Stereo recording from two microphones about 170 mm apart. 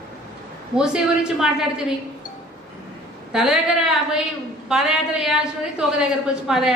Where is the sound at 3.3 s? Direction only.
5° right (ahead or behind).